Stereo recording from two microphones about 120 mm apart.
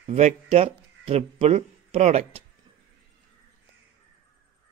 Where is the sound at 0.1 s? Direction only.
65° right (ahead or behind).